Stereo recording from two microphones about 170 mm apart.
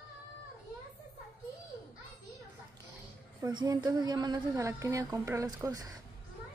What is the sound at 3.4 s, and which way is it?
A woman's voice, 25° right (ahead or behind).